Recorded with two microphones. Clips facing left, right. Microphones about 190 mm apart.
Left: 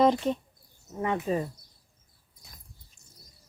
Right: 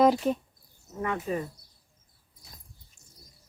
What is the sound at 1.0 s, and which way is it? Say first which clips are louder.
Speech: left 2 dB; 25° left (ahead or behind).